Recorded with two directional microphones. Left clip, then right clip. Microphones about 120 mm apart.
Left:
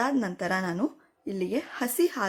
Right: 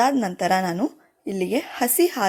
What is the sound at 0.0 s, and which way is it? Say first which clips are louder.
A woman's voice: right 8 dB; 30° right (ahead or behind).